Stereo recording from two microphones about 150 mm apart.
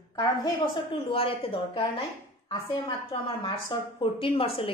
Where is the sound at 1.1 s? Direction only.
40° left (ahead or behind).